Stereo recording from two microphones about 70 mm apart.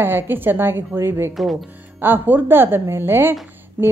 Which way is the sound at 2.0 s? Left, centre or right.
Right.